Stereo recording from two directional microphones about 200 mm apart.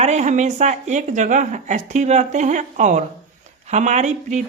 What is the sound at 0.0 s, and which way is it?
Speech, 35° right (ahead or behind).